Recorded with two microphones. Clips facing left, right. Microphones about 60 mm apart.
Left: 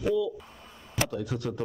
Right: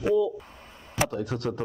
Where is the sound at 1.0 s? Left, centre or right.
Right.